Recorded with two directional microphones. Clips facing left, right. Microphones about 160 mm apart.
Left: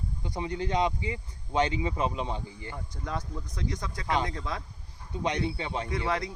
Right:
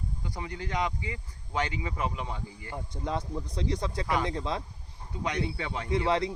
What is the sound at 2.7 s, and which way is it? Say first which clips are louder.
Speech: right 4 dB; 25° right (ahead or behind).